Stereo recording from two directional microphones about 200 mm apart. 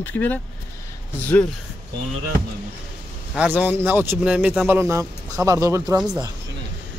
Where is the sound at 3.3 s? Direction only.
5° right (ahead or behind).